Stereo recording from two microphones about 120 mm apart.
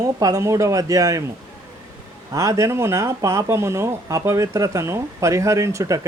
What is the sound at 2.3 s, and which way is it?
Speech, 25° right (ahead or behind).